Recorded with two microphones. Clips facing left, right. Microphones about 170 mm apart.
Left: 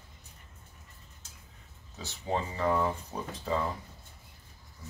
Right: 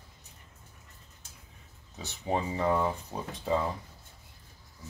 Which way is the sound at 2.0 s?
15° right (ahead or behind).